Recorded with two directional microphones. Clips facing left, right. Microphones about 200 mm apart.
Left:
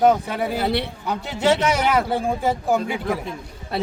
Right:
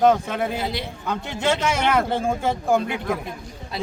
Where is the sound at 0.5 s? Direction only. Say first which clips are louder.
Left 5 dB; 65° left (ahead or behind).